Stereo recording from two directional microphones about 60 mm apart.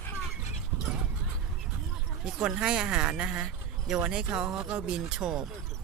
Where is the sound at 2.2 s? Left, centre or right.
Centre.